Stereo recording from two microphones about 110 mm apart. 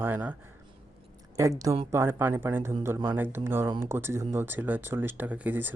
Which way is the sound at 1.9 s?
20° right (ahead or behind).